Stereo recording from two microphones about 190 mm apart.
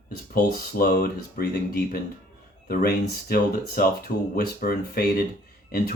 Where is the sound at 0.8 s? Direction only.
50° left (ahead or behind).